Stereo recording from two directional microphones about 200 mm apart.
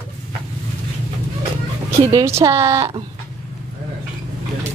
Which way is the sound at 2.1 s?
15° right (ahead or behind).